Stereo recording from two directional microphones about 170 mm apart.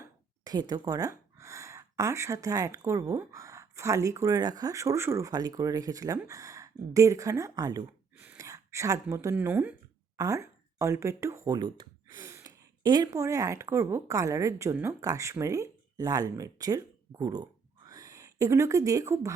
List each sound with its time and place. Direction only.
0.4 s speech: 20° right (ahead or behind)
8.1 s speech: 10° right (ahead or behind)